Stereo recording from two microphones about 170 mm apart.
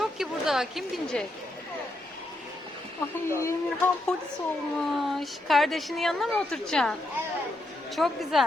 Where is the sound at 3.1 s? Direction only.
15° left (ahead or behind).